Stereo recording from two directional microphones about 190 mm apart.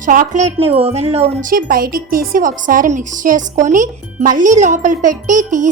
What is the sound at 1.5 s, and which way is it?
A woman's voice, 50° right (ahead or behind).